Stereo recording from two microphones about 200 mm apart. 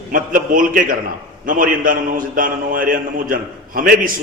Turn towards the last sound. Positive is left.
turn(degrees=-45)  # may be behind; listen again after turning